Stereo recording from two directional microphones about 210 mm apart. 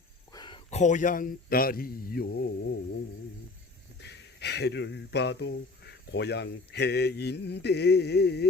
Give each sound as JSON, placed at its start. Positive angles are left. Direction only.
{"t": 0.3, "sound": "a man's voice", "side_deg": 20}
{"t": 4.0, "sound": "speech", "side_deg": 55}